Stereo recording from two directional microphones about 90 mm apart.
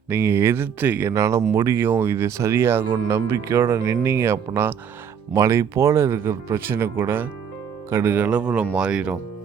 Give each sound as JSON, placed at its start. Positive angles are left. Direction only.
{"t": 0.1, "sound": "speech", "side_deg": -25}
{"t": 1.1, "sound": "speech", "side_deg": -35}